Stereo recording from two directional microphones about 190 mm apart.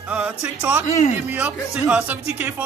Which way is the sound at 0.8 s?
35° left (ahead or behind).